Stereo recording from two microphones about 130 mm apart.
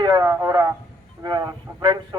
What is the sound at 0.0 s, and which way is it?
Radio, 25° right (ahead or behind).